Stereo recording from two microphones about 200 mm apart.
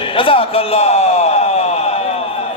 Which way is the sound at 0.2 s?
25° left (ahead or behind).